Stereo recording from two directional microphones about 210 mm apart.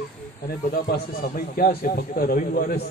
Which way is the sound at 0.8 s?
45° left (ahead or behind).